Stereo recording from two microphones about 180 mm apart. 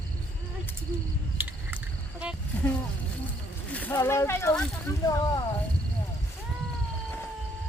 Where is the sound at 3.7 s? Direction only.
10° left (ahead or behind).